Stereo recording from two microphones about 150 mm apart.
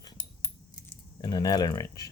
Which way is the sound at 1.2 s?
25° left (ahead or behind).